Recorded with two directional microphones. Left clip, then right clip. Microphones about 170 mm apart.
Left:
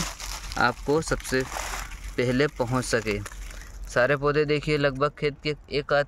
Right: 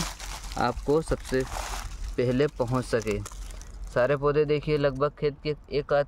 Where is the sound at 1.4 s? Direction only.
20° left (ahead or behind).